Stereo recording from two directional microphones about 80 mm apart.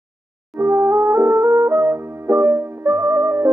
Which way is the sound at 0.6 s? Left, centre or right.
Right.